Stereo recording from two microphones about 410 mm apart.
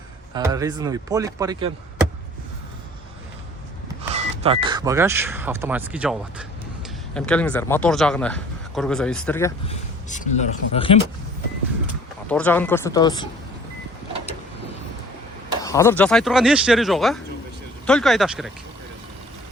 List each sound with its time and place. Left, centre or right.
0.3 s speech: centre
4.1 s speech: centre
10.1 s speech: centre
12.3 s speech: centre
15.6 s speech: centre